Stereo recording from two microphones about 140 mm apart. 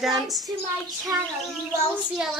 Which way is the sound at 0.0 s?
Centre (ahead or behind).